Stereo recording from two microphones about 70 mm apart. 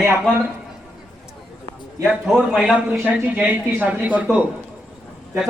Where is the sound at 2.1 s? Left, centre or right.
Centre.